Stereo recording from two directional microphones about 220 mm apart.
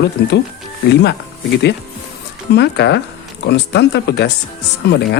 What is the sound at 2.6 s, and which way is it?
Speech, 50° left (ahead or behind).